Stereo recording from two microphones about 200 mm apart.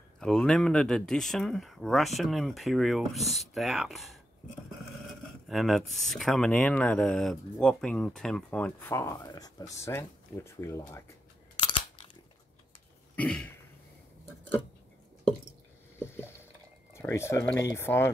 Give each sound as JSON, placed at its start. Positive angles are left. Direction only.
{"t": 0.2, "sound": "speech", "side_deg": 5}
{"t": 11.5, "sound": "crunch", "side_deg": 25}
{"t": 13.1, "sound": "throat clearing", "side_deg": 5}
{"t": 16.9, "sound": "speech", "side_deg": 15}